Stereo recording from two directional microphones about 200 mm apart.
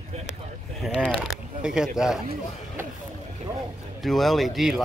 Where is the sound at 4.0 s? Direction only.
Centre (ahead or behind).